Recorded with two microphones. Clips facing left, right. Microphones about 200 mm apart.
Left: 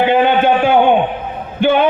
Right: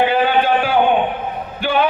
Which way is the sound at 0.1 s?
25° left (ahead or behind).